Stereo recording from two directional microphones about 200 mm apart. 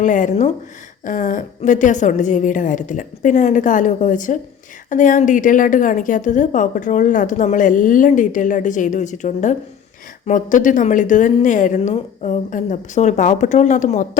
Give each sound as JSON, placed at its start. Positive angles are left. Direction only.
{"t": 0.0, "sound": "a woman's voice", "side_deg": 40}